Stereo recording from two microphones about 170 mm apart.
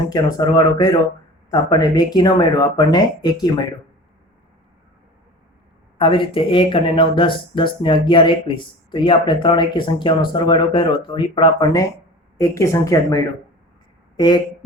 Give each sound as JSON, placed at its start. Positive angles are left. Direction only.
{"t": 0.1, "sound": "speech", "side_deg": 25}
{"t": 6.0, "sound": "speech", "side_deg": 30}